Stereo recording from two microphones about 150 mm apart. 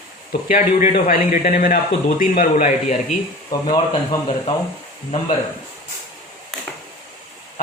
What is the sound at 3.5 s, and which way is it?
Speech, 30° left (ahead or behind).